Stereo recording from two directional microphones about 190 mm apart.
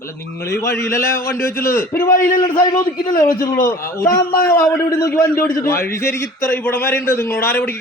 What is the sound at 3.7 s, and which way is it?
A man's voice, 15° left (ahead or behind).